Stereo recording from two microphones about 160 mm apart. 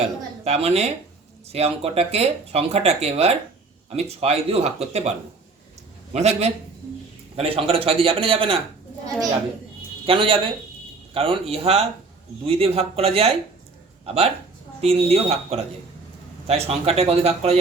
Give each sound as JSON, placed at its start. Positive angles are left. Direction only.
{"t": 0.0, "sound": "a woman's voice", "side_deg": -40}
{"t": 6.1, "sound": "a man's voice", "side_deg": -40}
{"t": 10.1, "sound": "speech", "side_deg": -35}